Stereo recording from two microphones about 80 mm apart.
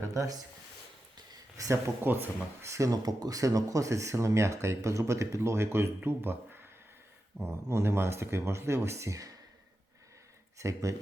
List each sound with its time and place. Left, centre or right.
0.1 s speech: right
1.1 s a sound: right
2.0 s speech: right
2.6 s speech: right
10.6 s speech: right